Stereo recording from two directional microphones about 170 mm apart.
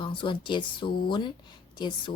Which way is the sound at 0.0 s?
30° left (ahead or behind).